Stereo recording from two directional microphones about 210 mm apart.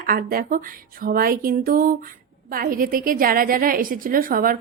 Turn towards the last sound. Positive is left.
turn(degrees=-40)  # may be behind; listen again after turning